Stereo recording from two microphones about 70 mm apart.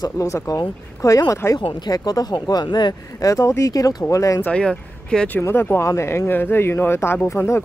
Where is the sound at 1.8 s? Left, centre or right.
Left.